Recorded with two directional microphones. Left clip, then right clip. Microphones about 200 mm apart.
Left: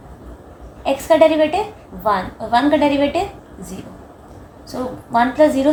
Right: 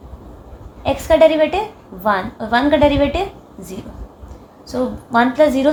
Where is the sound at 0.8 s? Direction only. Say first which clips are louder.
Right 1 dB; 40° right (ahead or behind).